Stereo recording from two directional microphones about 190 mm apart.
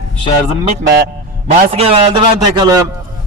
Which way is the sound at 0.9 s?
55° right (ahead or behind).